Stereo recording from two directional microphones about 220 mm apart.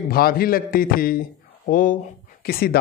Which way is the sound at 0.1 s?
40° left (ahead or behind).